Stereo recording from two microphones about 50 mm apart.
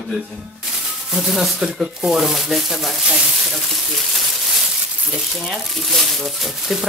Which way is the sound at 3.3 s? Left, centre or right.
Centre.